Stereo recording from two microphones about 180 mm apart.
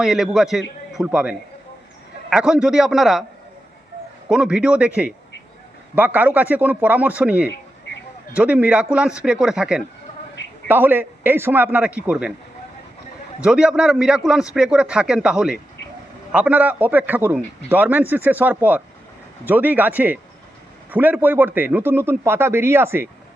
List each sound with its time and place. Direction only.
0.0 s a man's voice: centre (ahead or behind)
4.3 s a man's voice: 5° right (ahead or behind)
13.4 s a man's voice: 5° right (ahead or behind)